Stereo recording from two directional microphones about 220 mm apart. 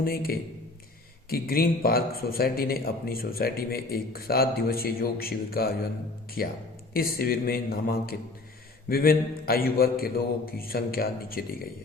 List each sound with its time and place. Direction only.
0.0 s a man's voice: 40° left (ahead or behind)